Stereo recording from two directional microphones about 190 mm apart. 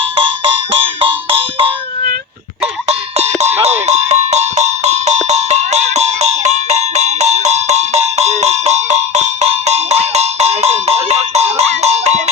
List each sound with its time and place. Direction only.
0.2 s music: 30° right (ahead or behind)
3.6 s music: 35° right (ahead or behind)